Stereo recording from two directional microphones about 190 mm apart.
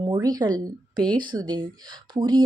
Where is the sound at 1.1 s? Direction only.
25° right (ahead or behind).